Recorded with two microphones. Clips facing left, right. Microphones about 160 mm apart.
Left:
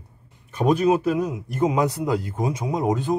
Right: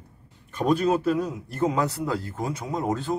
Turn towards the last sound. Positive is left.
turn(degrees=15)  # may be behind; listen again after turning